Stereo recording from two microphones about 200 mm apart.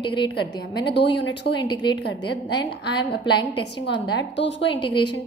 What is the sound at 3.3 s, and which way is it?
Speech, 25° left (ahead or behind).